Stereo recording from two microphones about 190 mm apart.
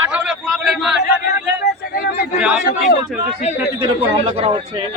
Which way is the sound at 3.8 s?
25° right (ahead or behind).